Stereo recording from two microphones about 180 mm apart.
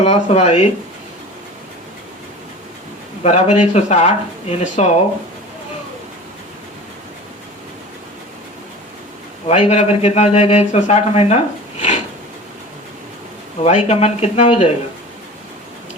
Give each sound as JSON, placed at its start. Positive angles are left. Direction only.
{"t": 0.0, "sound": "speech", "side_deg": 35}
{"t": 3.2, "sound": "speech", "side_deg": 40}
{"t": 9.5, "sound": "speech", "side_deg": 40}
{"t": 13.7, "sound": "speech", "side_deg": 40}